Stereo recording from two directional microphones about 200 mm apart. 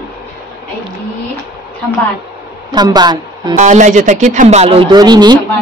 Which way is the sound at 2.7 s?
20° right (ahead or behind).